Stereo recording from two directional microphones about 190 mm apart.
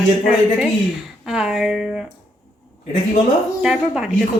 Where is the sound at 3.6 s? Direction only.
5° right (ahead or behind).